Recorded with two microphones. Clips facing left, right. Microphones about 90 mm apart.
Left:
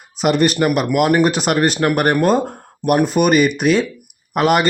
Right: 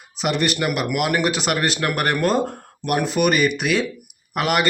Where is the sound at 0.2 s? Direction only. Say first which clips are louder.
Left 6 dB; 45° left (ahead or behind).